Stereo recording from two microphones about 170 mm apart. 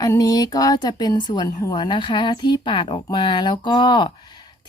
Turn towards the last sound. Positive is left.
turn(degrees=25)  # may be behind; listen again after turning